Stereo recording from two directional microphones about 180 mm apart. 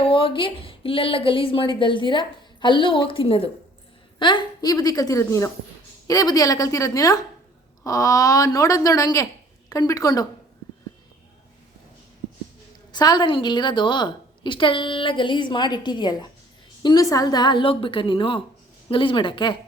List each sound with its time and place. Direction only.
0.0 s speech: 30° left (ahead or behind)
12.9 s speech: 25° left (ahead or behind)